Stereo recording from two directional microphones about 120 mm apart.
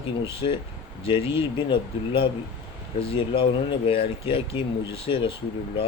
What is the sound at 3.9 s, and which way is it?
Speech, 50° left (ahead or behind).